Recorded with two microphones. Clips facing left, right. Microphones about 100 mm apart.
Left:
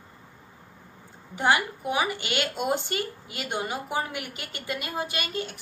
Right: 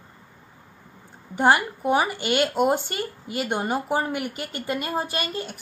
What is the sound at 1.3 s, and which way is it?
A woman's voice, 45° right (ahead or behind).